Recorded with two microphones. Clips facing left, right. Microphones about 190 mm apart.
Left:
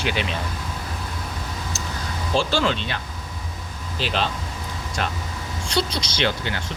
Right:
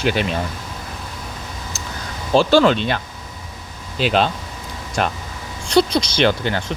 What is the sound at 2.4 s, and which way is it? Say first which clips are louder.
Speech: right 9 dB; 60° right (ahead or behind).